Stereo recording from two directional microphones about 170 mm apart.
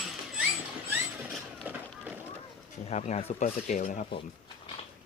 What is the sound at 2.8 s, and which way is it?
Speech, 40° left (ahead or behind).